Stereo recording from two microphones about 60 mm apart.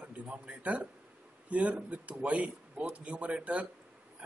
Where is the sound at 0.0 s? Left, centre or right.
Centre.